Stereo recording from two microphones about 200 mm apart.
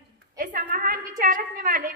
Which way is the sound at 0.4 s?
45° right (ahead or behind).